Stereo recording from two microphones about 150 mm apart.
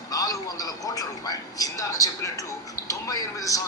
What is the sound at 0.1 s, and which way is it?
Speech, 25° left (ahead or behind).